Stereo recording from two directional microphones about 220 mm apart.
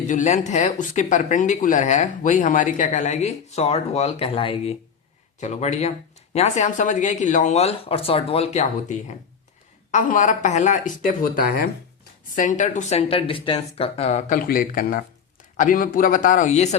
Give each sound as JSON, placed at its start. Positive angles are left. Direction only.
{"t": 0.1, "sound": "speech", "side_deg": 35}